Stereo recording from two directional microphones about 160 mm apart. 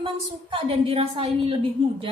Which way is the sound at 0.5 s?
35° right (ahead or behind).